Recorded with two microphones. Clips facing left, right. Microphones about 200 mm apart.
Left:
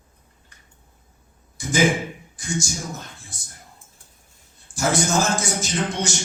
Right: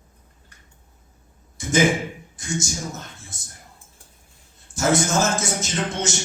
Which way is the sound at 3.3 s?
20° right (ahead or behind).